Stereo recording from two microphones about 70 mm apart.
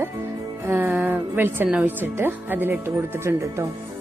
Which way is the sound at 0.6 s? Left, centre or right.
Right.